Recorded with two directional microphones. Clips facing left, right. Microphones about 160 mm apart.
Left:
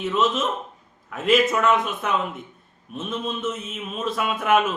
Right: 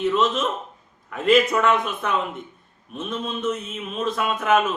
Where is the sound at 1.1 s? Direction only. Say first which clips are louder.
Right 2 dB; 5° left (ahead or behind).